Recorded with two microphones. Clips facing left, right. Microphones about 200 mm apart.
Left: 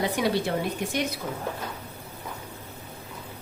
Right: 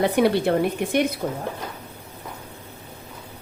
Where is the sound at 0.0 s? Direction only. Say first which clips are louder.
Right 6 dB; 55° right (ahead or behind).